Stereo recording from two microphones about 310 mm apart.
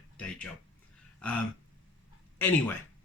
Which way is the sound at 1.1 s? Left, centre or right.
Centre.